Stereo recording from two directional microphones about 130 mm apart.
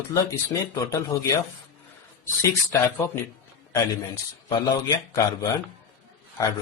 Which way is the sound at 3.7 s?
25° left (ahead or behind).